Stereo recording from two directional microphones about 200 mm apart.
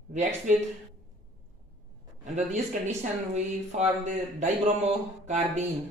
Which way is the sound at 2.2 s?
35° right (ahead or behind).